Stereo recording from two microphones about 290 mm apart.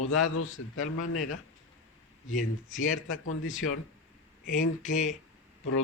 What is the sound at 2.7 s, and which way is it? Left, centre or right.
A man's voice, left.